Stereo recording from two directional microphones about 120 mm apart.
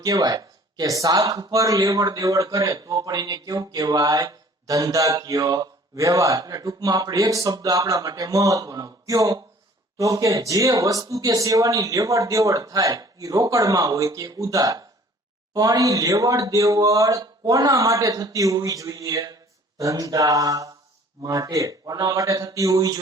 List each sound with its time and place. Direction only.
0.0 s a man's voice: 30° right (ahead or behind)